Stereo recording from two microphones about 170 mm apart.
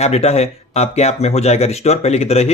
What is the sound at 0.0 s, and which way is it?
Speech, 40° left (ahead or behind).